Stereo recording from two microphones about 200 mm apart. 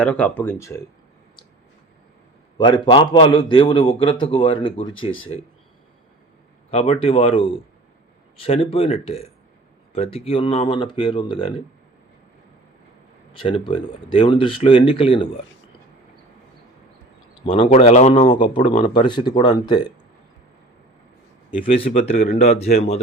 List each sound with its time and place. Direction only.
0.0 s speech: 5° left (ahead or behind)
2.6 s a man's voice: 25° left (ahead or behind)
6.7 s a man's voice: 30° left (ahead or behind)
13.3 s a man's voice: 25° left (ahead or behind)
17.4 s speech: 25° left (ahead or behind)
18.9 s a man's voice: 25° left (ahead or behind)
21.5 s speech: 25° left (ahead or behind)